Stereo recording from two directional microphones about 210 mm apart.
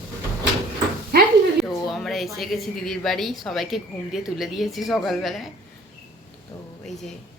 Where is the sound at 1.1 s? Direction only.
50° right (ahead or behind).